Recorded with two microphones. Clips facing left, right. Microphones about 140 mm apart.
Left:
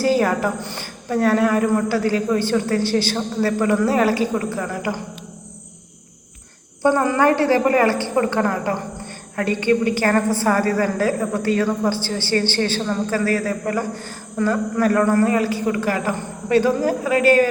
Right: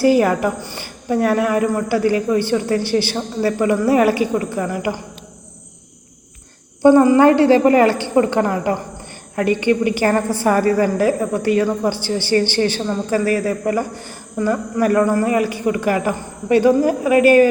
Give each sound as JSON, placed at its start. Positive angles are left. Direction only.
{"t": 0.0, "sound": "a woman's voice", "side_deg": -15}
{"t": 0.6, "sound": "a woman's voice", "side_deg": 60}
{"t": 1.1, "sound": "a woman's voice", "side_deg": -15}
{"t": 6.8, "sound": "a woman's voice", "side_deg": -15}